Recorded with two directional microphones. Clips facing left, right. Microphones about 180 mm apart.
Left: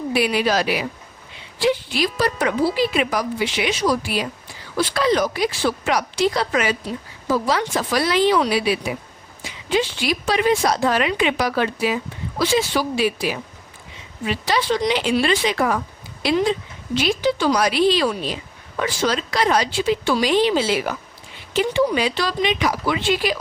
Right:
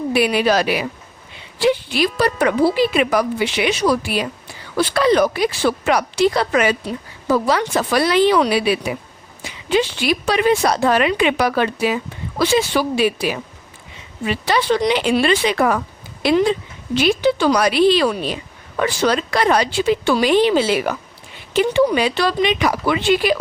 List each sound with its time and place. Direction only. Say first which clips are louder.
0.1 s a woman's voice: right 3 dB; 55° right (ahead or behind)
16.9 s a woman's voice: right 4 dB; 60° right (ahead or behind)